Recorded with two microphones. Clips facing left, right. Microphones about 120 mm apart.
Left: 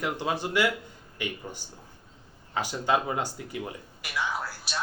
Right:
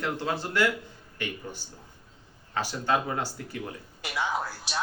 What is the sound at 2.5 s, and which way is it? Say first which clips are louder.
Speech: left 1 dB; 15° left (ahead or behind).